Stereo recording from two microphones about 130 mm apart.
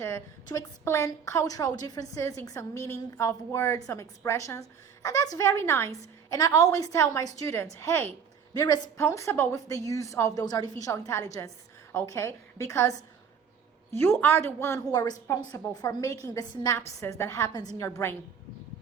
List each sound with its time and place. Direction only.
0.4 s a woman's voice: 25° left (ahead or behind)
8.5 s a woman's voice: 30° left (ahead or behind)
13.9 s a woman's voice: 15° left (ahead or behind)